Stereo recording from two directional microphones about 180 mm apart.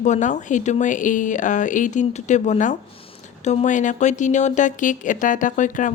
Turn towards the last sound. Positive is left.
turn(degrees=45)  # may be behind; listen again after turning